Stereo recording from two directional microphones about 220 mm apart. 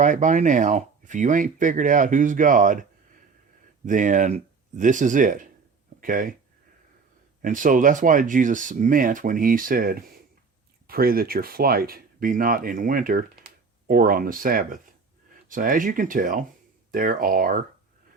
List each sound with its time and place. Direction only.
0.0 s speech: 35° right (ahead or behind)
3.8 s speech: 35° right (ahead or behind)
7.4 s speech: 35° right (ahead or behind)